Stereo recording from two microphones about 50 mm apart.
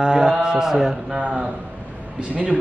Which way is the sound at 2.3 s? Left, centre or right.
Right.